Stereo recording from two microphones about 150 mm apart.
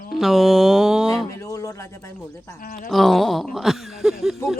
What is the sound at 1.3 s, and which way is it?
Speech, 20° left (ahead or behind).